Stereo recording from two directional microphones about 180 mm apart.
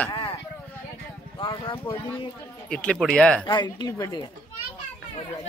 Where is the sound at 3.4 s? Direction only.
25° left (ahead or behind).